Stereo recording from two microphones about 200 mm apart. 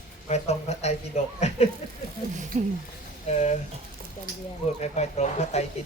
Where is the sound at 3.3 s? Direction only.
35° left (ahead or behind).